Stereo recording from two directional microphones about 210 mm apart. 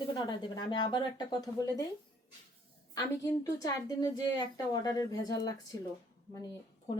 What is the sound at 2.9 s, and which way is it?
A woman's voice, 15° left (ahead or behind).